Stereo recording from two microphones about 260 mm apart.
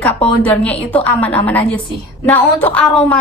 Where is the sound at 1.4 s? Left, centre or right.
Centre.